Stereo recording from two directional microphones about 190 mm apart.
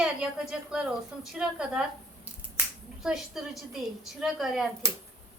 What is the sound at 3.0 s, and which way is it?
A woman's voice, centre (ahead or behind).